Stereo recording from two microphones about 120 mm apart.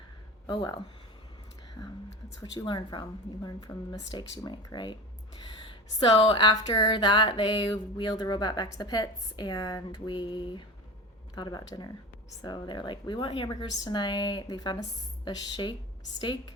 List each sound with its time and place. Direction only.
0.4 s a woman's voice: 35° left (ahead or behind)
2.4 s a woman's voice: 35° left (ahead or behind)